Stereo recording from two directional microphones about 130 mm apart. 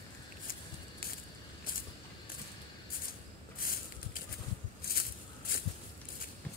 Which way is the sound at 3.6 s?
90° left.